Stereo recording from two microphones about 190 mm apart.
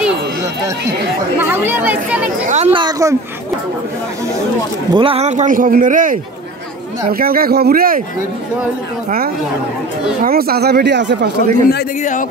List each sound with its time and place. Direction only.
1.4 s speech: 10° right (ahead or behind)
2.4 s a woman's voice: 35° right (ahead or behind)
2.7 s speech: 20° right (ahead or behind)
4.9 s a man's voice: 30° right (ahead or behind); by 8.0 s 50° right (ahead or behind)
10.2 s speech: 50° right (ahead or behind)
12.0 s speech: 40° left (ahead or behind)